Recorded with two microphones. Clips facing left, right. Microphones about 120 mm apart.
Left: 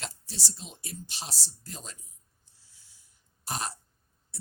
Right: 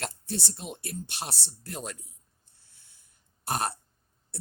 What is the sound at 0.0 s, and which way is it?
A woman's voice, 55° right (ahead or behind).